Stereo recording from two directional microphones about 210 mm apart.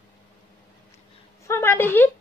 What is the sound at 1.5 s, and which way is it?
Speech, 10° left (ahead or behind).